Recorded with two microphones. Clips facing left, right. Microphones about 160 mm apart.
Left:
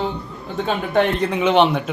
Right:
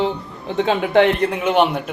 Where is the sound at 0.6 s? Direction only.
80° right.